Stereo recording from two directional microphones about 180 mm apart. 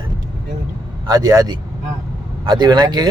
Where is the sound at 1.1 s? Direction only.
20° right (ahead or behind).